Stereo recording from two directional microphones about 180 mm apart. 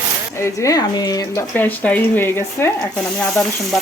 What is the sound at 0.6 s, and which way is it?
Speech, 20° left (ahead or behind).